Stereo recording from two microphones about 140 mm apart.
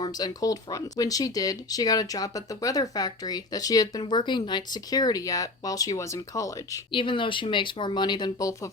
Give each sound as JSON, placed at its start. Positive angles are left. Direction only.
{"t": 0.0, "sound": "speech", "side_deg": 30}
{"t": 6.9, "sound": "speech", "side_deg": 35}